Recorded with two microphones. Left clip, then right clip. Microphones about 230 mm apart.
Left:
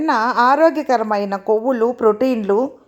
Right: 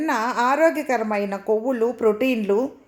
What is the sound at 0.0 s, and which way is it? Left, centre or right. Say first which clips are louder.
A woman's voice: left 6 dB; centre.